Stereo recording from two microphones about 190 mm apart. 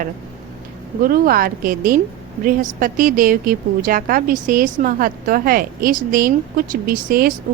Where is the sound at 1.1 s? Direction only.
50° right (ahead or behind).